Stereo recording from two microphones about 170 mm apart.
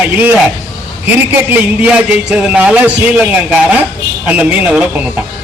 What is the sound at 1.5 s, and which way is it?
A man's voice, 10° right (ahead or behind).